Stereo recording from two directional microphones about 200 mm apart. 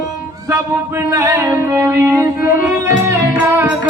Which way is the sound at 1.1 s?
15° right (ahead or behind).